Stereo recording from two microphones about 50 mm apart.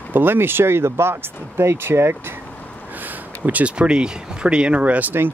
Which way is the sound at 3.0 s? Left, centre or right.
Right.